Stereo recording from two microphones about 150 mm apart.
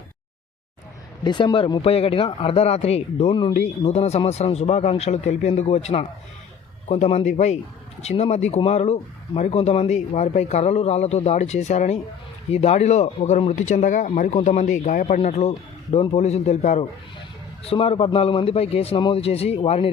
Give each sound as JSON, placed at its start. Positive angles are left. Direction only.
{"t": 1.2, "sound": "a man's voice", "side_deg": 30}